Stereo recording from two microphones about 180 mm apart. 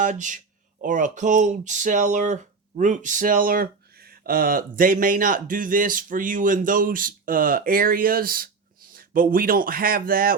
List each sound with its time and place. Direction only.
0.0 s speech: 45° right (ahead or behind)